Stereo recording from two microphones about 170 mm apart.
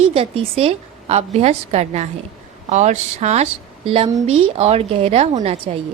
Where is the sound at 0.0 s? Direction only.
35° right (ahead or behind).